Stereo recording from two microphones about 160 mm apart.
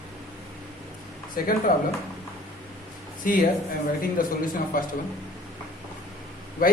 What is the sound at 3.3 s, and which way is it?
A woman's voice, 60° left (ahead or behind).